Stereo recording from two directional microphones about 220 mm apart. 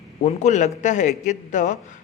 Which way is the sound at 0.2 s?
30° left (ahead or behind).